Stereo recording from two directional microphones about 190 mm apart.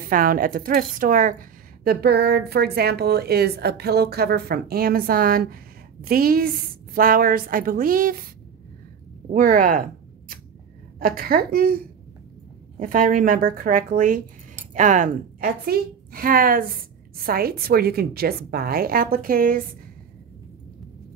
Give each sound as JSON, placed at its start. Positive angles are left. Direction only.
{"t": 0.1, "sound": "a woman's voice", "side_deg": -50}
{"t": 9.3, "sound": "a woman's voice", "side_deg": -45}
{"t": 11.0, "sound": "a woman's voice", "side_deg": -50}
{"t": 12.8, "sound": "a woman's voice", "side_deg": -45}